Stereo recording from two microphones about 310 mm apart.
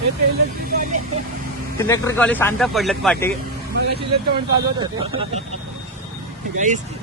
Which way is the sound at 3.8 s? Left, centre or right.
Right.